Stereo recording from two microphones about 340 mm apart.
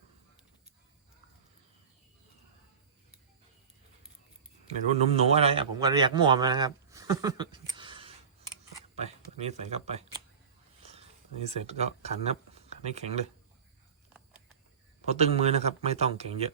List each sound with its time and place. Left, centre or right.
5.1 s speech: centre
11.4 s speech: centre
15.0 s speech: centre